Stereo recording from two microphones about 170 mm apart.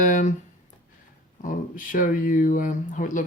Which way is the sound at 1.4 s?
50° left (ahead or behind).